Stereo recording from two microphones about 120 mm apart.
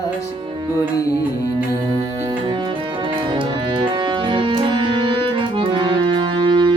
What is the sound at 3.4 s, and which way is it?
Music, 40° right (ahead or behind).